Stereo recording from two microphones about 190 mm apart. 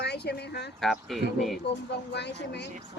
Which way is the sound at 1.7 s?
60° left (ahead or behind).